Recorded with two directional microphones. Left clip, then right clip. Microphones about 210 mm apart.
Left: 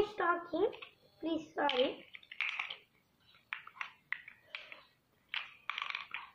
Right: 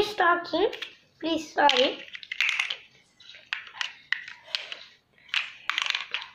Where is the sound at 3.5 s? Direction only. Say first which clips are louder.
Right 11 dB; 20° right (ahead or behind).